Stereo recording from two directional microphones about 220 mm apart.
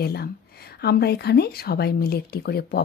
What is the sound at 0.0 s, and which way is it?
Speech, 45° left (ahead or behind).